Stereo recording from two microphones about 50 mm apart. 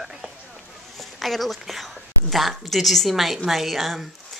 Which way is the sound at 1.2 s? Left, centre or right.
Centre.